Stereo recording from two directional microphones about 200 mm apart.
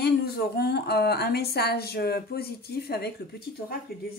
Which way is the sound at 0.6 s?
55° left (ahead or behind).